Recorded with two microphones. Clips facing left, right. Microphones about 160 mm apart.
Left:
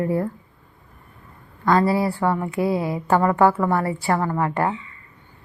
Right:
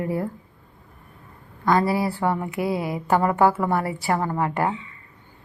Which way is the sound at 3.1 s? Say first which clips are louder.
Left 2 dB; 20° right (ahead or behind).